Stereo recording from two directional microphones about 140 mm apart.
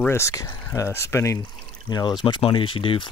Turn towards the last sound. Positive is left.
turn(degrees=40)  # may be behind; listen again after turning